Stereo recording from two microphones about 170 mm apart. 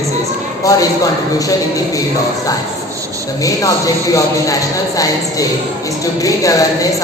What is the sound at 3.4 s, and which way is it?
Speech, 20° left (ahead or behind).